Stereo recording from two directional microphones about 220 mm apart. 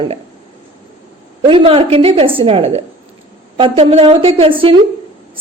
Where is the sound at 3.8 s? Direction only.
25° right (ahead or behind).